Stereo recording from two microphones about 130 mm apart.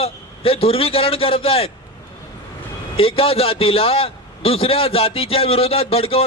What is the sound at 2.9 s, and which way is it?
A man's voice, 45° left (ahead or behind).